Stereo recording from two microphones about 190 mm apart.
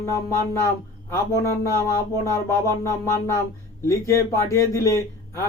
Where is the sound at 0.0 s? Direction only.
15° left (ahead or behind).